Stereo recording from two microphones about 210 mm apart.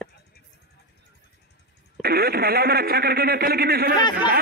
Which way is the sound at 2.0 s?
45° right (ahead or behind).